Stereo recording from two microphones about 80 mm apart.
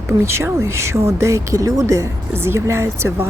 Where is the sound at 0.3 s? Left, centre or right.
Right.